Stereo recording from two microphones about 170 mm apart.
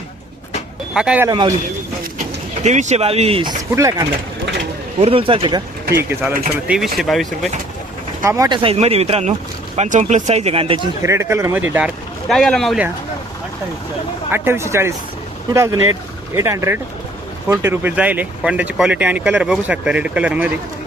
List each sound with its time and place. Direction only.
0.9 s speech: 5° right (ahead or behind)
1.3 s speech: 20° right (ahead or behind)
2.6 s speech: 45° right (ahead or behind)
3.8 s speech: 20° right (ahead or behind)
4.9 s speech: 35° right (ahead or behind)
6.0 s speech: 15° right (ahead or behind)
6.7 s speech: centre (ahead or behind)
8.2 s speech: 15° right (ahead or behind); by 10.8 s 35° right (ahead or behind)
11.0 s speech: 15° right (ahead or behind)
12.3 s speech: centre (ahead or behind)
14.3 s speech: 15° right (ahead or behind)